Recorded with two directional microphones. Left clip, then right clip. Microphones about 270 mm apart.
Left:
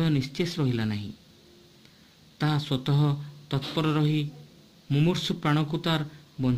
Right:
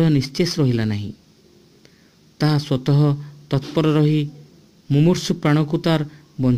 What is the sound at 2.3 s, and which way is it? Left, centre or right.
Speech, centre.